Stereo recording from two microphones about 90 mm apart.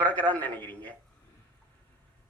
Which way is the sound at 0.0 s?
15° left (ahead or behind).